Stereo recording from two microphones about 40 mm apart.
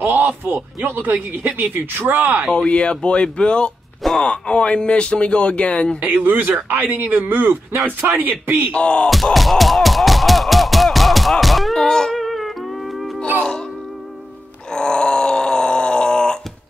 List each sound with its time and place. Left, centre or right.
0.0 s speech: right
2.5 s speech: left
6.2 s speech: right
8.7 s speech: left
9.1 s a sound: centre
11.7 s wail: centre
12.2 s music: centre
14.7 s groan: centre